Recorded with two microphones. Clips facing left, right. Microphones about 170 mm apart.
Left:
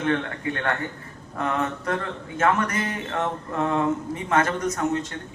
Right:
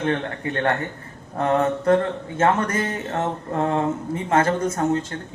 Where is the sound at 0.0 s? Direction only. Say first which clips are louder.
Right 1 dB; 35° right (ahead or behind).